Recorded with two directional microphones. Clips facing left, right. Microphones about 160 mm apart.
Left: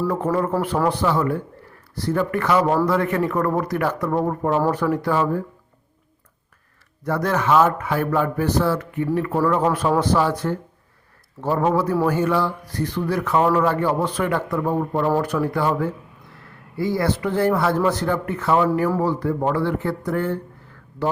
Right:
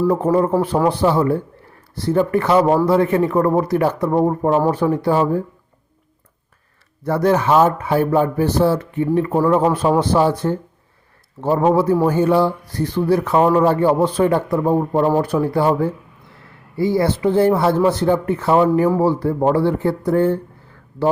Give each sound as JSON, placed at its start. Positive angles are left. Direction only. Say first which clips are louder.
{"t": 0.1, "sound": "speech", "louder": "right 5 dB", "side_deg": -30}
{"t": 0.3, "sound": "speech", "louder": "right 5 dB", "side_deg": -20}
{"t": 0.9, "sound": "speech", "louder": "right 5 dB", "side_deg": -30}
{"t": 7.0, "sound": "speech", "louder": "right 5 dB", "side_deg": -30}